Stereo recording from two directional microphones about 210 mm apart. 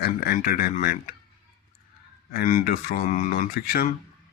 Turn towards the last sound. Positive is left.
turn(degrees=45)  # may be behind; listen again after turning